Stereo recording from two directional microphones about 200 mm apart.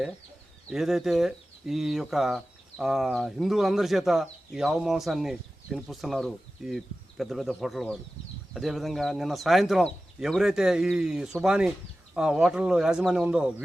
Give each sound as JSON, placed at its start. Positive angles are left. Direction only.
{"t": 0.7, "sound": "speech", "side_deg": 0}